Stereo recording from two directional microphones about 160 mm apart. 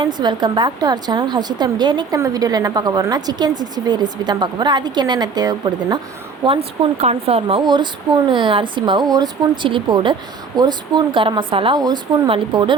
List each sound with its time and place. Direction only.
0.0 s speech: 25° right (ahead or behind)
6.4 s speech: 35° right (ahead or behind)